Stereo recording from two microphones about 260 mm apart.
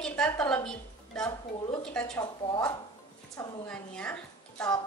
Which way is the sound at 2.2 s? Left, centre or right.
Centre.